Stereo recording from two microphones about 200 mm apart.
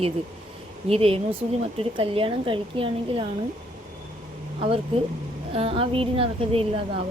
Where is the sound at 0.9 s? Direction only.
30° right (ahead or behind).